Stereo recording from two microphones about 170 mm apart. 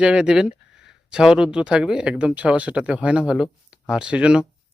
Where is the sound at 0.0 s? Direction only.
5° right (ahead or behind).